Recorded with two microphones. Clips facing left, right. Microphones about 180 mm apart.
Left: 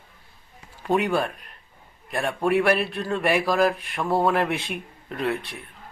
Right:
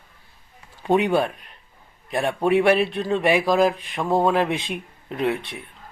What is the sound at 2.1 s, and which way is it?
A man's voice, 20° right (ahead or behind).